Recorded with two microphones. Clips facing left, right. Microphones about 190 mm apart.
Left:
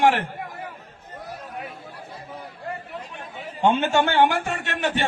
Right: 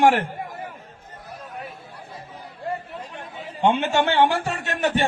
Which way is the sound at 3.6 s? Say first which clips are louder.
Even; 20° right (ahead or behind).